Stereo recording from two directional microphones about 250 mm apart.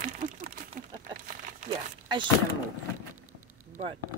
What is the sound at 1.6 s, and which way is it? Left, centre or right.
Speech, right.